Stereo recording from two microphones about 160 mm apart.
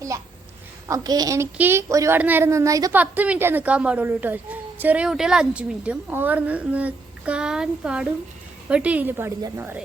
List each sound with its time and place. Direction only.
0.9 s speech: 20° right (ahead or behind)
3.0 s a woman's voice: 10° right (ahead or behind)